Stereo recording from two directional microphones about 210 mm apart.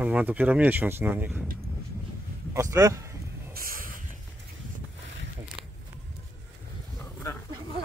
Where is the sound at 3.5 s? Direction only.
45° right (ahead or behind).